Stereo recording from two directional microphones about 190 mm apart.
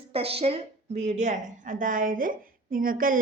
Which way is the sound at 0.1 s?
30° right (ahead or behind).